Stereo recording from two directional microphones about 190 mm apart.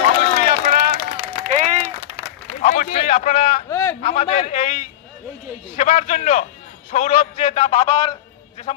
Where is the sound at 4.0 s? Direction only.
35° left (ahead or behind).